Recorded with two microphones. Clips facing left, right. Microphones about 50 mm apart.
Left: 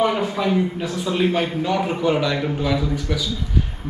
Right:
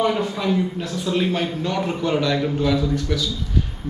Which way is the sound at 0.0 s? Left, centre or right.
Centre.